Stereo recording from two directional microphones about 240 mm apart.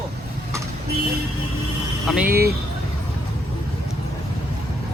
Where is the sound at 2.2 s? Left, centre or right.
Right.